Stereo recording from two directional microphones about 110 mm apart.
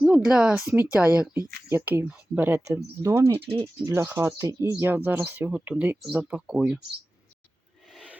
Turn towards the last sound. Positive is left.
turn(degrees=-10)  # may be behind; listen again after turning